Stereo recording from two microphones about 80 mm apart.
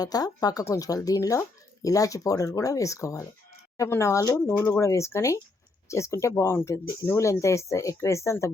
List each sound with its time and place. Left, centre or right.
0.0 s speech: left